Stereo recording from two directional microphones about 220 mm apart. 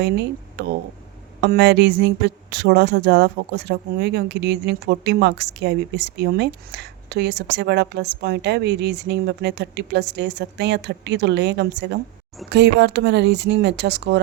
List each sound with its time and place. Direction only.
0.0 s speech: 50° right (ahead or behind)